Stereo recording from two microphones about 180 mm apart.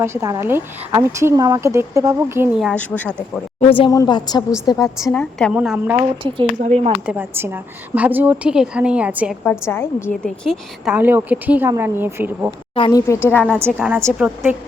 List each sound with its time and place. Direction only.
0.0 s a woman's voice: 15° right (ahead or behind)
2.6 s a woman's voice: 5° left (ahead or behind)
3.8 s a woman's voice: 20° left (ahead or behind)
5.1 s a woman's voice: 5° left (ahead or behind)
5.5 s a woman's voice: 5° right (ahead or behind)
6.0 s speech: 30° right (ahead or behind)
7.0 s a woman's voice: 10° right (ahead or behind)
9.4 s a woman's voice: 10° left (ahead or behind)
10.9 s a woman's voice: 10° right (ahead or behind)
12.7 s speech: 30° left (ahead or behind)
13.2 s a woman's voice: 10° left (ahead or behind)
13.7 s a woman's voice: 10° right (ahead or behind)